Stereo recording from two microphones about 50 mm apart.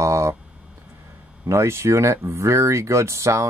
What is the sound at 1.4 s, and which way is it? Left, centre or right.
Speech, right.